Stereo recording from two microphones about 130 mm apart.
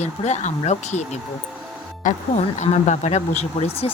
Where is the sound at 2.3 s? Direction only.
60° left (ahead or behind).